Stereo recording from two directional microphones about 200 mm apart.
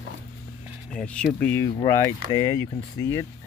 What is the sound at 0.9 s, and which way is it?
Speech, 5° left (ahead or behind).